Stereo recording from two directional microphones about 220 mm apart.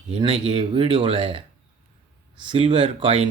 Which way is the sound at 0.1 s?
25° right (ahead or behind).